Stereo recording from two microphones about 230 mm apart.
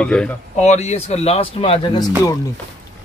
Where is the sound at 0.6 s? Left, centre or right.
Left.